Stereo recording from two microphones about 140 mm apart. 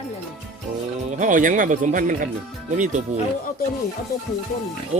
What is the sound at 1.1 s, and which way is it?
Speech, 65° right (ahead or behind).